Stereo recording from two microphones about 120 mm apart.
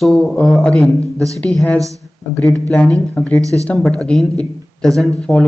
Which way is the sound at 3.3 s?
25° right (ahead or behind).